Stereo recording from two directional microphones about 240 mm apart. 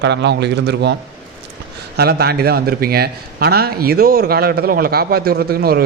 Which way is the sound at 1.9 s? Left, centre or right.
Right.